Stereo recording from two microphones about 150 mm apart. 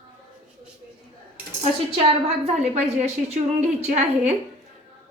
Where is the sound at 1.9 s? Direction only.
40° right (ahead or behind).